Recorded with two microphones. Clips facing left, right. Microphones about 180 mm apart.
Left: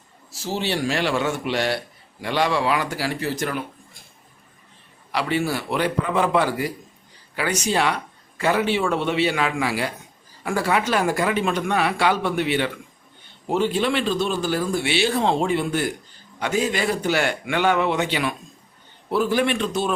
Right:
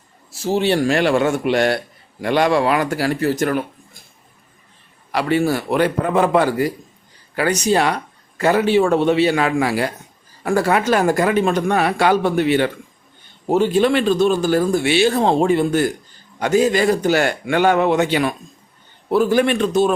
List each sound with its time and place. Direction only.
0.3 s speech: 50° right (ahead or behind)
5.1 s speech: 45° right (ahead or behind)